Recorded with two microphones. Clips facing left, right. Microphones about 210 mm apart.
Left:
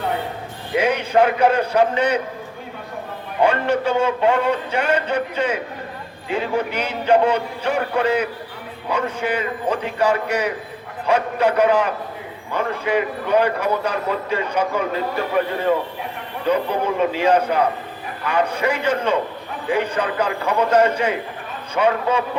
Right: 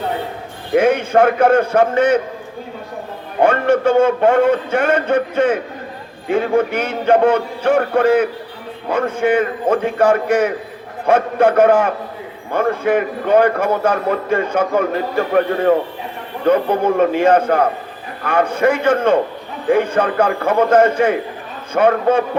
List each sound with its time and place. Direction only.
0.8 s a man's voice: 50° right (ahead or behind)
3.4 s a man's voice: 50° right (ahead or behind)
16.5 s a man's voice: 50° right (ahead or behind)